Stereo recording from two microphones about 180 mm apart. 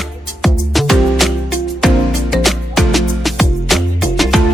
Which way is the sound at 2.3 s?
Centre (ahead or behind).